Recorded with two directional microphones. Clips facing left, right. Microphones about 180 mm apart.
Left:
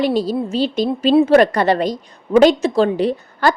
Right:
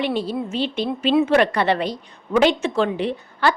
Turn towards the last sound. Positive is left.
turn(degrees=40)  # may be behind; listen again after turning